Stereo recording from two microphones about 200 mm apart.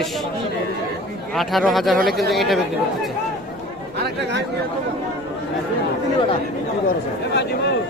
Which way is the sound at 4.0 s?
60° right (ahead or behind).